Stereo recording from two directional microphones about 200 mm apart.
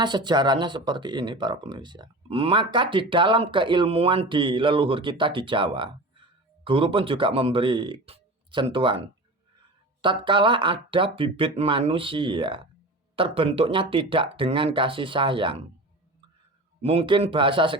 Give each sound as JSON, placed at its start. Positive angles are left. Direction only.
{"t": 0.0, "sound": "speech", "side_deg": -20}
{"t": 16.8, "sound": "speech", "side_deg": -30}